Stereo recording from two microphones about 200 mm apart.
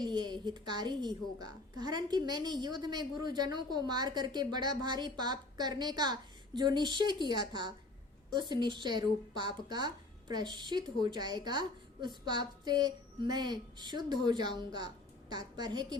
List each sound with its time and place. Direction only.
0.0 s a woman's voice: 20° right (ahead or behind)
8.3 s a woman's voice: 20° right (ahead or behind)